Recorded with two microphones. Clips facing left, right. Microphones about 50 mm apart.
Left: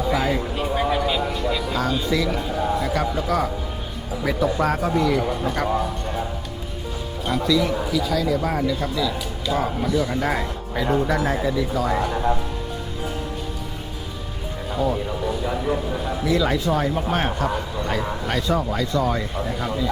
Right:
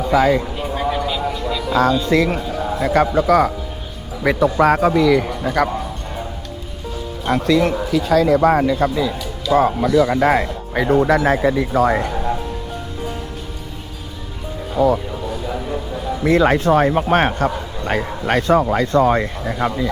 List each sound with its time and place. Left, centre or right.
0.1 s a man's voice: right
0.5 s a sound: centre
1.7 s a man's voice: right
5.6 s a man's voice: right
7.3 s a man's voice: right
14.8 s a man's voice: right
16.2 s a man's voice: right